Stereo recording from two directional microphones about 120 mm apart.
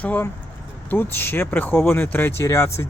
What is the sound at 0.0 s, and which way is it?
Speech, 15° left (ahead or behind).